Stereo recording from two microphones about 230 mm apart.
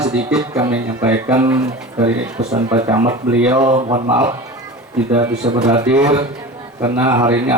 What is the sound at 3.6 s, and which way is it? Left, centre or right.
Speech, right.